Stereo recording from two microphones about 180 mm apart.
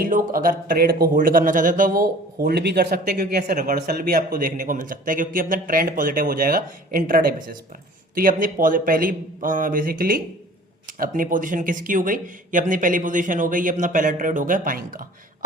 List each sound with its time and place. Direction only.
0.0 s speech: 50° right (ahead or behind)
3.2 s speech: 50° right (ahead or behind)